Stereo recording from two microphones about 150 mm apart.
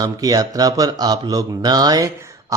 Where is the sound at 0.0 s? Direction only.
25° right (ahead or behind).